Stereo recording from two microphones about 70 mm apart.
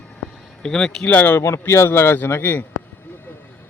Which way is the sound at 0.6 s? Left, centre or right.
Centre.